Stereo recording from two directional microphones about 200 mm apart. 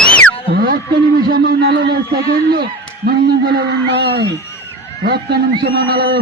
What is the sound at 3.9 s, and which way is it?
Speech, 50° right (ahead or behind).